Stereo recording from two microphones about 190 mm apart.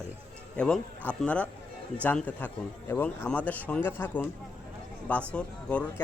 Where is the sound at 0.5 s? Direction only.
5° left (ahead or behind).